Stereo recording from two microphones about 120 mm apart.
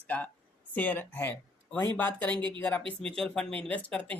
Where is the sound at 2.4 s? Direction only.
40° right (ahead or behind).